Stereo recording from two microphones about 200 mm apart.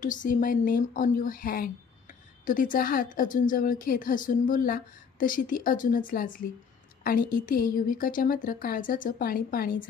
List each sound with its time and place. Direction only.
0.0 s speech: 40° left (ahead or behind)